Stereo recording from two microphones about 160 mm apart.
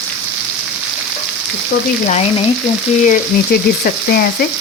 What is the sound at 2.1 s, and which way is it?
Frying, 40° left (ahead or behind).